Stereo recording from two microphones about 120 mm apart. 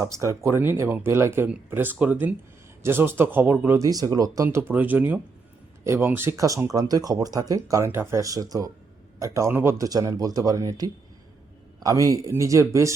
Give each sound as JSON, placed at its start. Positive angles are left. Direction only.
{"t": 0.0, "sound": "speech", "side_deg": -25}
{"t": 3.8, "sound": "speech", "side_deg": -30}
{"t": 4.4, "sound": "speech", "side_deg": -15}